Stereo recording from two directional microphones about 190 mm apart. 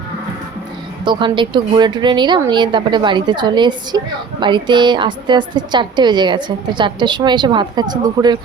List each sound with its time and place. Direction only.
1.0 s a woman's voice: 25° right (ahead or behind)